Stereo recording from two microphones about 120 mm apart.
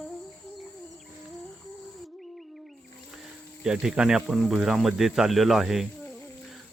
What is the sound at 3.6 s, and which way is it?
Speech, 5° right (ahead or behind).